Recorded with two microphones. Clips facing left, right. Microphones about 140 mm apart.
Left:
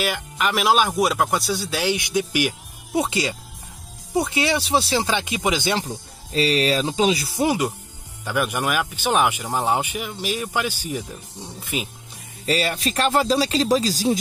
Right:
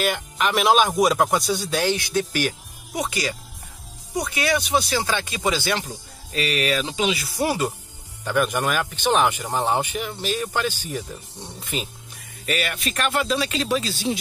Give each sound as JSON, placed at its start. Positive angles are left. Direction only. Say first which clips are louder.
{"t": 0.0, "sound": "speech", "louder": "right 1 dB", "side_deg": 0}
{"t": 2.9, "sound": "speech", "louder": "left 4 dB", "side_deg": 25}
{"t": 5.8, "sound": "speech", "louder": "left 4 dB", "side_deg": 30}
{"t": 7.3, "sound": "speech", "louder": "left 2 dB", "side_deg": 15}
{"t": 12.4, "sound": "speech", "louder": "left 4 dB", "side_deg": 30}